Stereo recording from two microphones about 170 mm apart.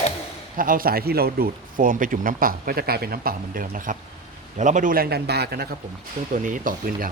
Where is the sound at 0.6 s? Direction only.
55° right (ahead or behind).